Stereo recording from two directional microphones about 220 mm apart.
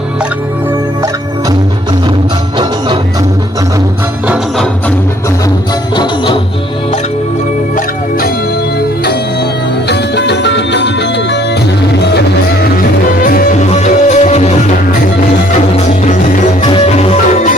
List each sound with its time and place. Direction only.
4.3 s music: centre (ahead or behind)
6.0 s music: 20° left (ahead or behind)
9.9 s music: 50° left (ahead or behind)
13.2 s music: 35° left (ahead or behind)
16.6 s music: 25° left (ahead or behind)